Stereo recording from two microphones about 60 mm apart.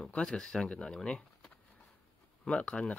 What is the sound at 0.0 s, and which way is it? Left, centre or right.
Speech, centre.